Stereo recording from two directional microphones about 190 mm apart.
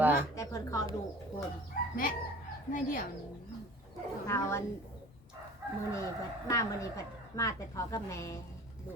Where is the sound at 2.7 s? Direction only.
45° left (ahead or behind).